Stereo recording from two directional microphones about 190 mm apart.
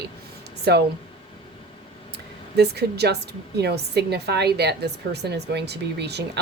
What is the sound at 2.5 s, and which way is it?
A woman's voice, 60° right (ahead or behind).